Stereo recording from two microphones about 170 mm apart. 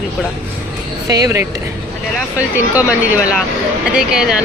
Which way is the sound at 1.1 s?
20° right (ahead or behind).